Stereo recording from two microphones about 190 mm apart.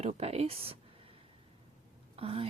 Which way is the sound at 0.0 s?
35° right (ahead or behind).